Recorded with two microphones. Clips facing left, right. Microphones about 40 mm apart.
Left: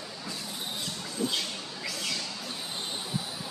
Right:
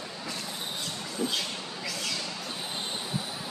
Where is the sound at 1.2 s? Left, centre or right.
Centre.